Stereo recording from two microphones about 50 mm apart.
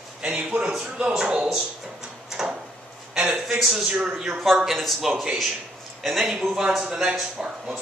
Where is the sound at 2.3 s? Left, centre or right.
Centre.